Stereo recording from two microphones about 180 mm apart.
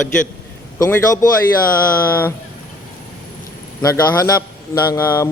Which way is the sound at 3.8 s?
20° left (ahead or behind).